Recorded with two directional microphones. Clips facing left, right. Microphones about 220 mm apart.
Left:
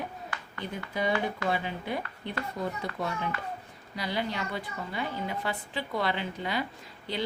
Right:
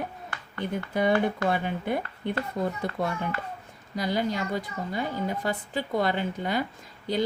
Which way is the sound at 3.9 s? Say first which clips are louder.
Right 5 dB; 45° right (ahead or behind).